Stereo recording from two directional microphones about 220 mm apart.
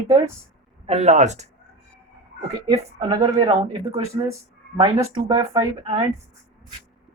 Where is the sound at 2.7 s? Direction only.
20° right (ahead or behind).